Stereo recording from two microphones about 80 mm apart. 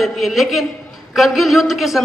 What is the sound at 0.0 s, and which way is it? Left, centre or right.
A man's voice, centre.